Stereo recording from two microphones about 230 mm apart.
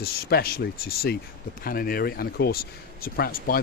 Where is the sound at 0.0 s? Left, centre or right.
Left.